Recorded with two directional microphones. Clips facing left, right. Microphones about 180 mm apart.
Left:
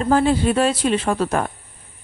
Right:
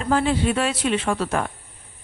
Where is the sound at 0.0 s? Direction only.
40° left (ahead or behind).